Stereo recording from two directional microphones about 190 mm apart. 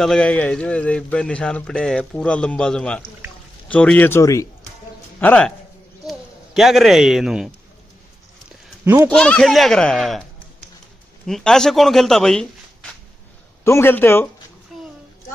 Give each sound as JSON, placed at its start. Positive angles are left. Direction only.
{"t": 0.0, "sound": "a man's voice", "side_deg": 5}
{"t": 8.8, "sound": "speech", "side_deg": -15}
{"t": 9.1, "sound": "a man's voice", "side_deg": 5}
{"t": 11.2, "sound": "a man's voice", "side_deg": 0}
{"t": 13.7, "sound": "a man's voice", "side_deg": 10}